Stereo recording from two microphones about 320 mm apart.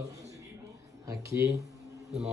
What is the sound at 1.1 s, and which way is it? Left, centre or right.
Speech, centre.